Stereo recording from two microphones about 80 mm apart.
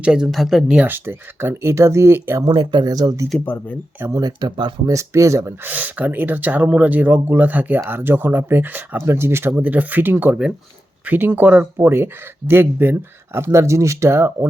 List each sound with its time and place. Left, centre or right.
0.0 s speech: centre
0.8 s speech: right
2.4 s speech: right
3.4 s speech: left
4.2 s speech: right
4.9 s speech: right
5.6 s speech: right